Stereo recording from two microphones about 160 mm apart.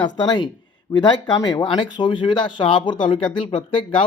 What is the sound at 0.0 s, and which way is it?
Speech, 30° left (ahead or behind).